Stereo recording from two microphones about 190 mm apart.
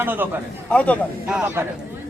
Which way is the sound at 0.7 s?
5° left (ahead or behind).